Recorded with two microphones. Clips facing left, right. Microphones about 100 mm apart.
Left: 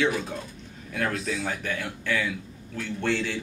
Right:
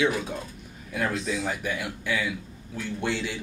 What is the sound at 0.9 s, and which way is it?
Speech, centre (ahead or behind).